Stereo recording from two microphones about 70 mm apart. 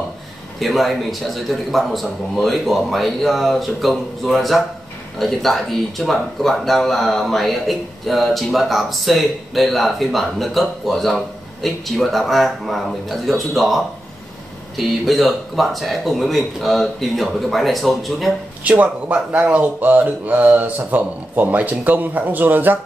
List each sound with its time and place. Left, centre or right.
0.6 s speech: centre
18.6 s speech: right